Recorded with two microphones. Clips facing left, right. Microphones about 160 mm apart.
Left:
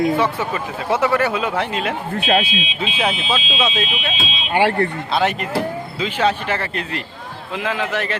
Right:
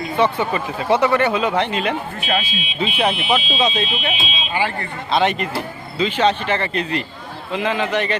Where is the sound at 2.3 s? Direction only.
70° left (ahead or behind).